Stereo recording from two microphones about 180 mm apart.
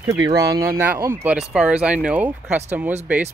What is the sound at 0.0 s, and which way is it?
Speech, 20° right (ahead or behind).